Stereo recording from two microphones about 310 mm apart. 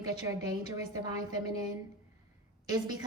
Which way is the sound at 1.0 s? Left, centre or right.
Centre.